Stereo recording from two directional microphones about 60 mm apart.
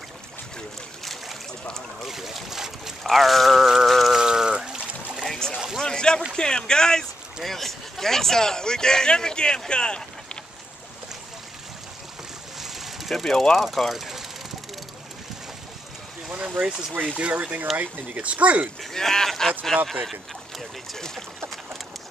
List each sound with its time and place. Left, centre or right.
2.0 s speech: centre
4.2 s a sound: centre
5.2 s a sound: centre
6.3 s a man's voice: centre
12.5 s vehicle: centre
16.3 s speech: centre
18.8 s speech: centre